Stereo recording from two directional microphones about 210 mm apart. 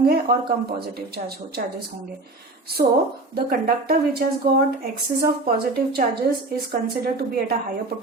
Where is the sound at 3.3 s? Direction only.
45° right (ahead or behind).